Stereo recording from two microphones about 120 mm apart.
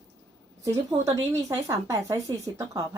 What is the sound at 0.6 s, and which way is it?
A woman's voice, 30° right (ahead or behind).